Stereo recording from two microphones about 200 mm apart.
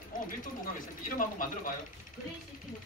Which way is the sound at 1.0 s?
40° left (ahead or behind).